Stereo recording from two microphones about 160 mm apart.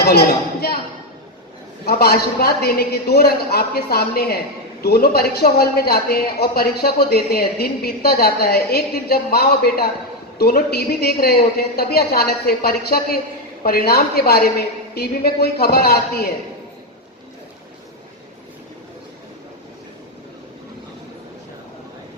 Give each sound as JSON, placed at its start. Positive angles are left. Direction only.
{"t": 0.0, "sound": "a sound", "side_deg": 85}
{"t": 1.8, "sound": "a woman's voice", "side_deg": 80}
{"t": 14.9, "sound": "a woman's voice", "side_deg": 85}